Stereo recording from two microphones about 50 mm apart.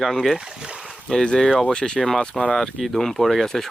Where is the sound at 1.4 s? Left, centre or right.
Centre.